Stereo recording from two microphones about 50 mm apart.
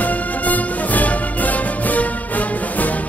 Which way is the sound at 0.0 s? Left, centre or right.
Left.